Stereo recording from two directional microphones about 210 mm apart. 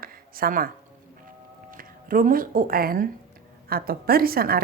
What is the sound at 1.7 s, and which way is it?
Speech, 40° right (ahead or behind).